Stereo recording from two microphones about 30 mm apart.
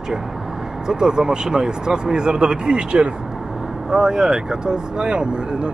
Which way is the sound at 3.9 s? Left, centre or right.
Right.